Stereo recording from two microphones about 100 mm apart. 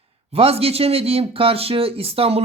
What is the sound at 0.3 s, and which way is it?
Speech, 75° right (ahead or behind).